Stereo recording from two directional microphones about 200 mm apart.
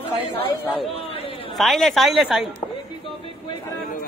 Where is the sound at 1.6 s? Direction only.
Centre (ahead or behind).